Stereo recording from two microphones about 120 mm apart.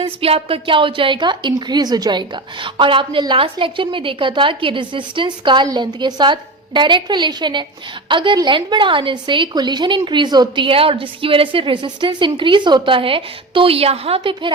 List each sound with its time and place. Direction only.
0.0 s a woman's voice: 50° right (ahead or behind)